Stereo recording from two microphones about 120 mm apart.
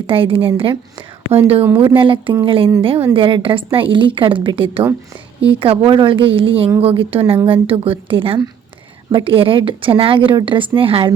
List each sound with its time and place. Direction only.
0.1 s a woman's voice: 45° right (ahead or behind)